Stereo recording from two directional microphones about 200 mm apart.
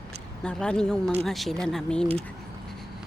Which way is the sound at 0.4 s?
5° left (ahead or behind).